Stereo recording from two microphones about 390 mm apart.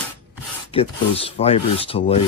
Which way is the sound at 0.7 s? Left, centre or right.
Centre.